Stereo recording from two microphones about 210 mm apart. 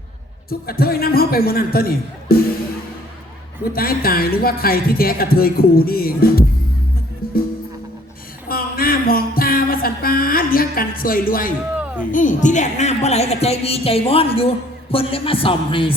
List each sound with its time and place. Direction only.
0.7 s speech: 45° left (ahead or behind)
3.6 s speech: 45° left (ahead or behind)
8.4 s music: 45° left (ahead or behind)
12.1 s a woman's voice: 35° left (ahead or behind)